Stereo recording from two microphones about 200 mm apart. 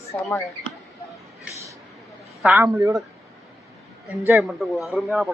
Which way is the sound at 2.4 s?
10° right (ahead or behind).